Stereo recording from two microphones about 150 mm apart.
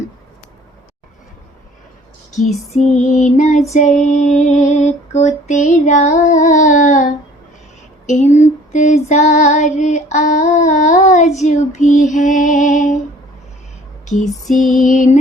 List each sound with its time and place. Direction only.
2.7 s female singing: 50° left (ahead or behind)
14.8 s music: 60° left (ahead or behind)